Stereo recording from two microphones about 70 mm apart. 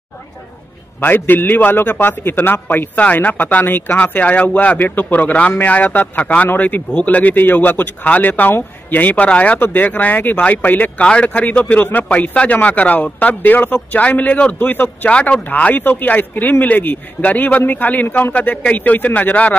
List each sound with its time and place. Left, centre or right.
1.0 s a man's voice: left